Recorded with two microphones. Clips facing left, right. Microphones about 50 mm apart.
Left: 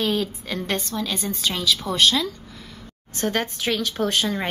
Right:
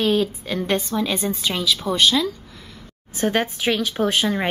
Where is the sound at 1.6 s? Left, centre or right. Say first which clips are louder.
Right 1 dB; centre.